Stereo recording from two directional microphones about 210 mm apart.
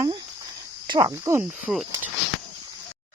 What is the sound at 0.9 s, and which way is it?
Speech, 20° right (ahead or behind).